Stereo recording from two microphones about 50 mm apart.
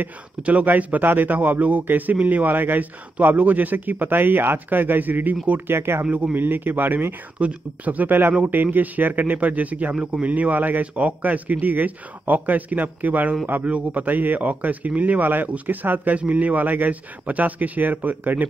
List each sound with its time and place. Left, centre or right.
0.4 s speech: right
5.7 s speech: right
6.3 s speech: right
7.3 s speech: right